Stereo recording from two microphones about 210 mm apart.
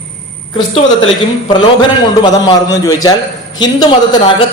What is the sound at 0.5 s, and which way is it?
A man's voice, 25° left (ahead or behind).